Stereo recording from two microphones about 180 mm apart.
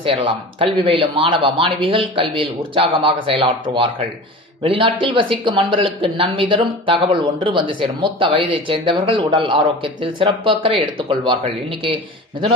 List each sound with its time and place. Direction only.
0.0 s speech: 30° right (ahead or behind)
5.0 s speech: 25° right (ahead or behind)